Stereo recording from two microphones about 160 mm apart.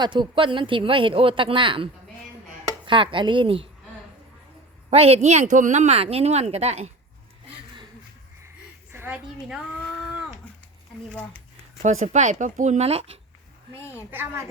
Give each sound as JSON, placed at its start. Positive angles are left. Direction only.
{"t": 0.0, "sound": "speech", "side_deg": -30}
{"t": 4.9, "sound": "speech", "side_deg": -40}
{"t": 8.9, "sound": "a woman's voice", "side_deg": -10}
{"t": 11.8, "sound": "speech", "side_deg": -50}
{"t": 13.7, "sound": "a woman's voice", "side_deg": 15}
{"t": 14.1, "sound": "a child's voice", "side_deg": -15}